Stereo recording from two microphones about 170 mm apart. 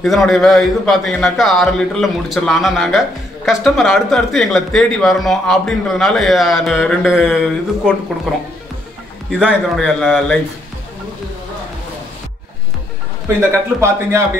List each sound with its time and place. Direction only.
0.0 s a man's voice: centre (ahead or behind)
9.8 s a man's voice: 5° left (ahead or behind)
13.4 s a man's voice: 15° right (ahead or behind)